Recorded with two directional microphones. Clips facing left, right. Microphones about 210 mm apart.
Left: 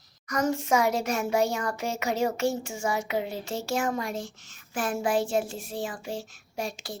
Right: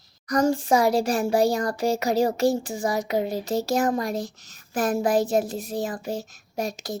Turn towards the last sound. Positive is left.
turn(degrees=-40)  # may be behind; listen again after turning